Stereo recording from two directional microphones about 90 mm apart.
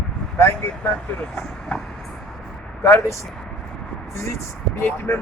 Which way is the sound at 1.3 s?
5° left (ahead or behind).